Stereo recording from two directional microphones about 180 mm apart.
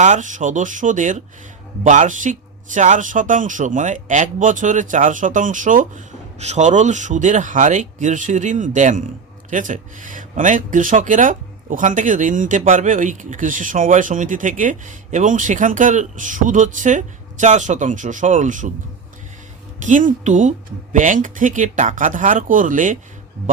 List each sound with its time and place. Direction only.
0.0 s speech: 45° right (ahead or behind)
19.8 s speech: 45° right (ahead or behind)